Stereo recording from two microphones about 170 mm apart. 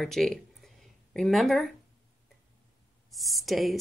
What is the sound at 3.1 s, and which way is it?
Speech, centre (ahead or behind).